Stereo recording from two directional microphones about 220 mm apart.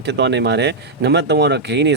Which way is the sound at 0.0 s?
50° right (ahead or behind).